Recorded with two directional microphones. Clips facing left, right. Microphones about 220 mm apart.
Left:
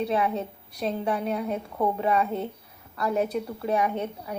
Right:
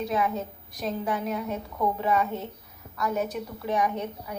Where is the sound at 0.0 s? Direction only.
35° left (ahead or behind).